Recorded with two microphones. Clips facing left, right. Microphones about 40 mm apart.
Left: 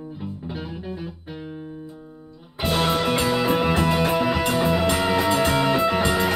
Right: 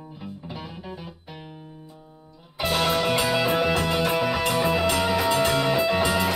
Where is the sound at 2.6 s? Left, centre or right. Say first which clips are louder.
Left 1 dB; centre.